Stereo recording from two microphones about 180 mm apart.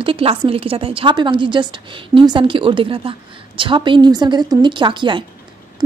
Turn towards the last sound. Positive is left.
turn(degrees=-25)  # may be behind; listen again after turning